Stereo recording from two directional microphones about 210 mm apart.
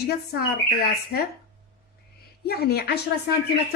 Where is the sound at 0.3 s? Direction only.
50° left (ahead or behind).